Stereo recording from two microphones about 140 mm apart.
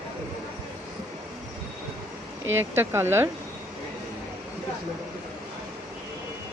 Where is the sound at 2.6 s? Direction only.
15° right (ahead or behind).